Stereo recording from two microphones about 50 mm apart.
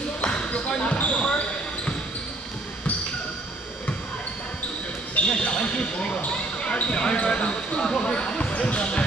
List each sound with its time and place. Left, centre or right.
0.2 s basketball bounce: left
5.3 s basketball bounce: left